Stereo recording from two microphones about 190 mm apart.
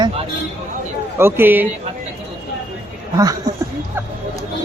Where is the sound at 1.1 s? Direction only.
10° right (ahead or behind).